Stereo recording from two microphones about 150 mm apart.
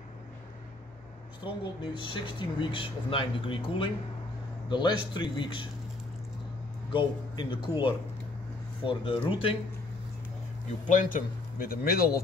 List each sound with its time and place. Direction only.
1.4 s speech: 35° left (ahead or behind)
6.9 s speech: 30° left (ahead or behind)
10.9 s speech: 60° left (ahead or behind); by 12.2 s 90° left